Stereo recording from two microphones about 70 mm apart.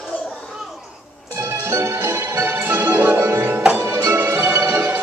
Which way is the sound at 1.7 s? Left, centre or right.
Right.